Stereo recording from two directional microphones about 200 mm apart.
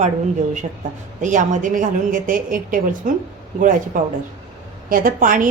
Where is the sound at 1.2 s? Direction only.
40° right (ahead or behind).